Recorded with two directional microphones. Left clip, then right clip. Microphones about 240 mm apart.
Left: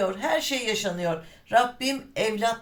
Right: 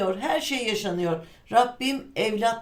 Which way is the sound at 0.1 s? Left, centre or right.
Centre.